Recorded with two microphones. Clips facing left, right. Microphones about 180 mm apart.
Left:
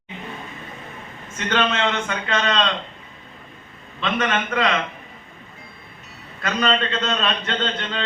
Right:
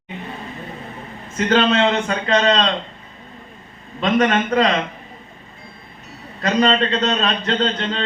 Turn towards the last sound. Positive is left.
turn(degrees=-35)  # may be behind; listen again after turning